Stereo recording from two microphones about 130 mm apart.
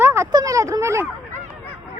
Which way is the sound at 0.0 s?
20° right (ahead or behind).